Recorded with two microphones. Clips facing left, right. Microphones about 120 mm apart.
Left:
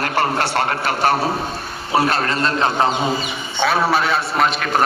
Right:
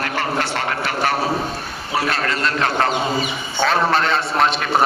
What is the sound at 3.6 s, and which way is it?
A man's voice, 5° left (ahead or behind).